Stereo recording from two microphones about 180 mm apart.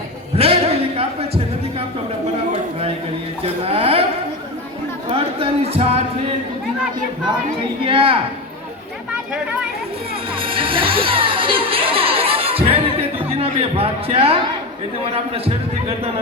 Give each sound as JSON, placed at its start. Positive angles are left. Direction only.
{"t": 0.3, "sound": "a sound", "side_deg": -35}
{"t": 3.4, "sound": "music", "side_deg": -35}
{"t": 5.1, "sound": "a sound", "side_deg": -30}
{"t": 7.9, "sound": "speech", "side_deg": -30}
{"t": 10.4, "sound": "music", "side_deg": -30}
{"t": 13.3, "sound": "speech", "side_deg": -35}